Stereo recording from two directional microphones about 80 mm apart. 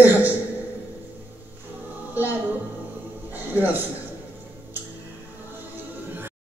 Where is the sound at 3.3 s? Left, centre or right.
Right.